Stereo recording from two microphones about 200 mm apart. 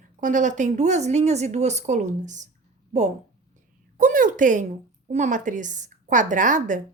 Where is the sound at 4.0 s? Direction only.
45° right (ahead or behind).